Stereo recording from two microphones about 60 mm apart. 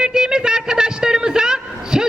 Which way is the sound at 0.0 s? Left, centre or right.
Centre.